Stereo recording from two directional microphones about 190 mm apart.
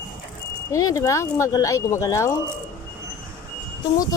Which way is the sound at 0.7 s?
15° left (ahead or behind).